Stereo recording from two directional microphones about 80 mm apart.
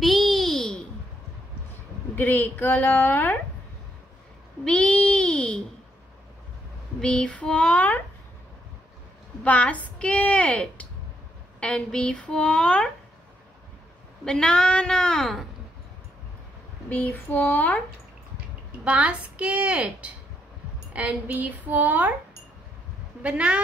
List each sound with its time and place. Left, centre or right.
0.0 s babbling: centre
2.1 s a woman's voice: left
4.6 s a woman's voice: centre
7.0 s a woman's voice: centre
9.4 s a woman's voice: centre
14.2 s a woman's voice: centre
16.9 s a woman's voice: left
18.9 s a woman's voice: centre
23.2 s a woman's voice: centre